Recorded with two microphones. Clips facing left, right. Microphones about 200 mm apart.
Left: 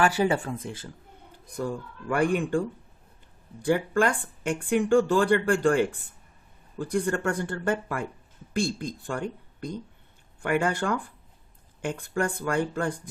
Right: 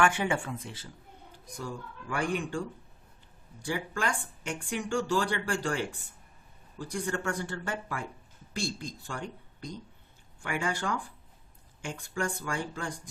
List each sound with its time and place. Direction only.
0.0 s speech: 35° left (ahead or behind); by 13.0 s 55° left (ahead or behind)